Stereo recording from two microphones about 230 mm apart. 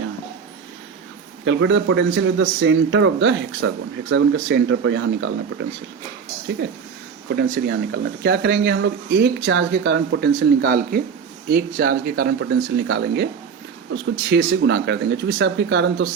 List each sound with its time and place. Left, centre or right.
1.5 s a man's voice: right
7.3 s speech: right